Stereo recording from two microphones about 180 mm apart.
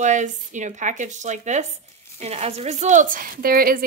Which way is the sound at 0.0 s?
45° right (ahead or behind).